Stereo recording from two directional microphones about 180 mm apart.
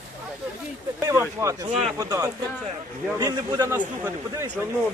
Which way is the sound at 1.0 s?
15° right (ahead or behind).